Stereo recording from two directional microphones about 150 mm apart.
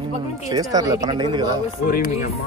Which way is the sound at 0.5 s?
25° right (ahead or behind).